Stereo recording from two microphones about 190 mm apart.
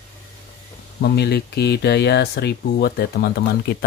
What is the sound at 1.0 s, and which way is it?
Speech, 60° left (ahead or behind).